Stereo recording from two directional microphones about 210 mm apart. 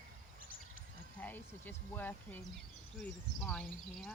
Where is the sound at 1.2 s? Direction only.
10° left (ahead or behind).